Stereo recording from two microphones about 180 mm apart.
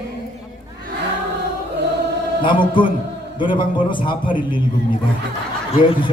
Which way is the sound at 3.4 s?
25° left (ahead or behind).